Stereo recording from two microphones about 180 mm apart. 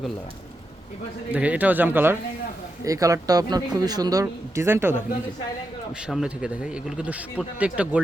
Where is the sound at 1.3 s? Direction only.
10° right (ahead or behind).